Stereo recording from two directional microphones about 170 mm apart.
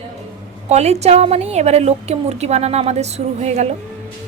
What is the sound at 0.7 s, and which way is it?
A woman's voice, 40° right (ahead or behind).